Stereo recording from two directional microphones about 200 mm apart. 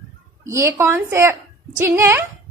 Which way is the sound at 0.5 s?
15° right (ahead or behind).